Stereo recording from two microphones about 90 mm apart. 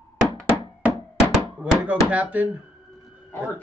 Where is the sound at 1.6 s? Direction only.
15° right (ahead or behind).